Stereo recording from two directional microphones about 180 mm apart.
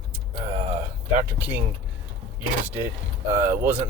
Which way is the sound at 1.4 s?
10° right (ahead or behind).